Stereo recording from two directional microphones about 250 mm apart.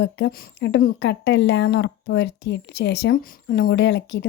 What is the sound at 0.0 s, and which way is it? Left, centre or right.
Speech, left.